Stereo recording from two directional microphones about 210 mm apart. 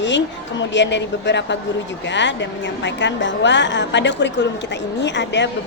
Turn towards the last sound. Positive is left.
turn(degrees=55)  # may be behind; listen again after turning